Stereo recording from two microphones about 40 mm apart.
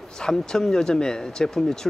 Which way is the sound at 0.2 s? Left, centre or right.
Centre.